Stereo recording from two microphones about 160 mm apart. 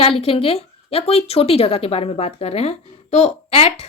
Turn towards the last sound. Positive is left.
turn(degrees=40)  # may be behind; listen again after turning